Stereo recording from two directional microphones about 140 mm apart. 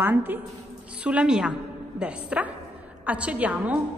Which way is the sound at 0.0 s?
15° right (ahead or behind).